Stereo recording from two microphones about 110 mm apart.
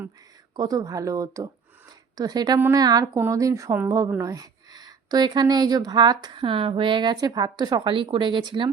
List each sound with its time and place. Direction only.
0.5 s a woman's voice: 35° right (ahead or behind)